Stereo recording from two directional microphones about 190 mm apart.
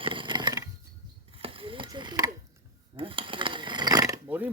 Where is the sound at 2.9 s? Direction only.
25° right (ahead or behind); by 4.5 s 10° right (ahead or behind).